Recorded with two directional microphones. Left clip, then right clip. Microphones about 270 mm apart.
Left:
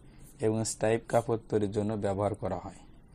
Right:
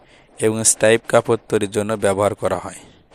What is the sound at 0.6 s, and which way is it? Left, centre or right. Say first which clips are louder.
Speech: right 14 dB; right.